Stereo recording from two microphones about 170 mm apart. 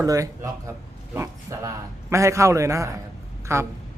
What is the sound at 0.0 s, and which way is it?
A man's voice, 20° right (ahead or behind).